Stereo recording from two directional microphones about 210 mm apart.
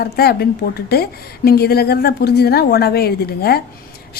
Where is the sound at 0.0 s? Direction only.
50° left (ahead or behind).